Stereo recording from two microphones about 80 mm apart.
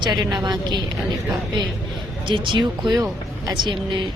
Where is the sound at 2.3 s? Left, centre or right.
Right.